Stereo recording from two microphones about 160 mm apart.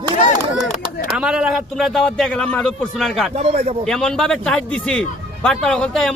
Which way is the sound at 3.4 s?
40° right (ahead or behind).